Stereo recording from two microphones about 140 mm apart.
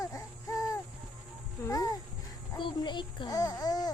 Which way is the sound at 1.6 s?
25° left (ahead or behind).